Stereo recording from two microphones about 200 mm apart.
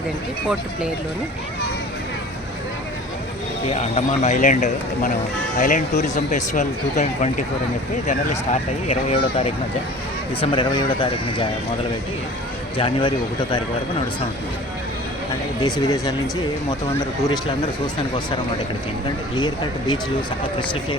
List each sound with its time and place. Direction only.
3.7 s speech: 35° left (ahead or behind)
8.9 s speech: 30° left (ahead or behind)
12.7 s speech: 25° left (ahead or behind)
15.6 s speech: 20° left (ahead or behind)